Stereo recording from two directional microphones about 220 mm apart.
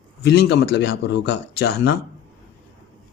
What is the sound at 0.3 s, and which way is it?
Speech, 50° left (ahead or behind).